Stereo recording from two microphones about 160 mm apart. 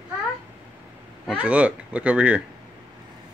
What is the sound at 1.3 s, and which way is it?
Speech, 10° right (ahead or behind).